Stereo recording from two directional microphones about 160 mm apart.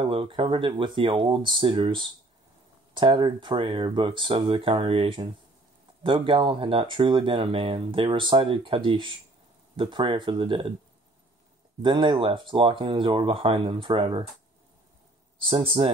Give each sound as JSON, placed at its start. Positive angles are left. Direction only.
{"t": 0.0, "sound": "speech", "side_deg": -35}
{"t": 11.8, "sound": "speech", "side_deg": -30}
{"t": 15.4, "sound": "speech", "side_deg": -35}